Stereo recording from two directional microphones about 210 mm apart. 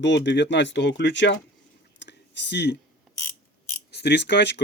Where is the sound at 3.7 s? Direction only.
50° left (ahead or behind).